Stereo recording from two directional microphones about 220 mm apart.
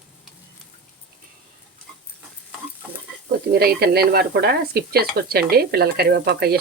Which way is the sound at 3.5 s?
45° right (ahead or behind).